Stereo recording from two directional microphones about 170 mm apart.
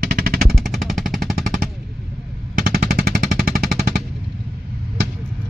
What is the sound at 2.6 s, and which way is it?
Machine gun, 60° right (ahead or behind).